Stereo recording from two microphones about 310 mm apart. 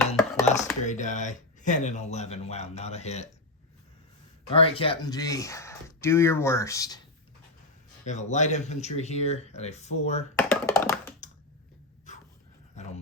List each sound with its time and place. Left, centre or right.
0.4 s chopping: left
0.9 s speech: left
4.5 s speech: centre
8.0 s speech: left
10.3 s computer keyboard: centre
11.2 s computer keyboard: left
12.1 s dog: left